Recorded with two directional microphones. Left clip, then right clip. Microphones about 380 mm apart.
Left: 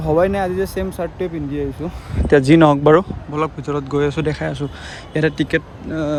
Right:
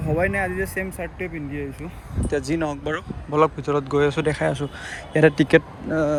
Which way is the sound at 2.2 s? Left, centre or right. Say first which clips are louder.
Left 13 dB; centre.